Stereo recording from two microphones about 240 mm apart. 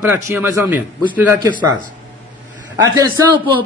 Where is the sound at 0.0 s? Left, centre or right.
Centre.